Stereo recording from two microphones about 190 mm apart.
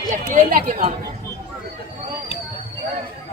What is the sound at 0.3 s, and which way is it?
Speech, 45° right (ahead or behind).